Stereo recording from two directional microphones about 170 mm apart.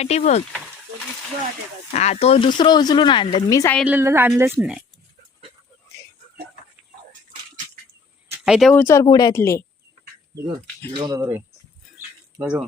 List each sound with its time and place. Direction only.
0.0 s speech: 40° left (ahead or behind)
2.0 s speech: 40° left (ahead or behind); by 3.8 s 20° left (ahead or behind)
3.8 s a woman's voice: 15° right (ahead or behind)
8.4 s speech: 5° right (ahead or behind)
8.7 s a woman's voice: 15° left (ahead or behind)
10.9 s a woman's voice: 25° right (ahead or behind); by 12.6 s 5° right (ahead or behind)